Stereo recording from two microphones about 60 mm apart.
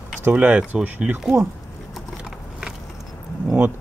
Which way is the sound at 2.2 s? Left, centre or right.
Centre.